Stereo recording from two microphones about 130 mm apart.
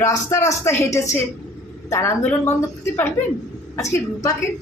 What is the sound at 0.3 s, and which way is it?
A woman's voice, 20° left (ahead or behind).